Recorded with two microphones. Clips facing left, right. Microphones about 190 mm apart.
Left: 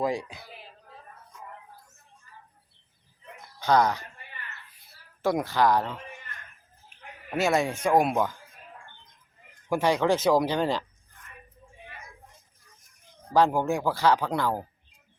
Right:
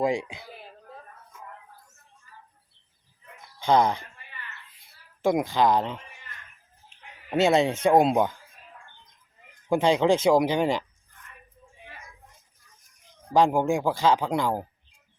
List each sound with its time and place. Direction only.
0.0 s speech: 20° right (ahead or behind)
3.7 s speech: 25° right (ahead or behind)
5.2 s speech: 15° right (ahead or behind)
7.3 s speech: 25° right (ahead or behind)
9.6 s speech: 20° right (ahead or behind)
13.3 s speech: 15° right (ahead or behind)